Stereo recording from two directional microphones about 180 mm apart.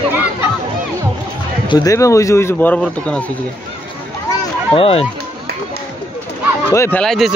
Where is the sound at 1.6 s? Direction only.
20° left (ahead or behind); by 3.2 s 5° left (ahead or behind).